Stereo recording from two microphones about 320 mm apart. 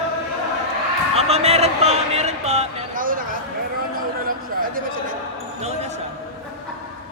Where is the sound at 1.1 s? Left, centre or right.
Centre.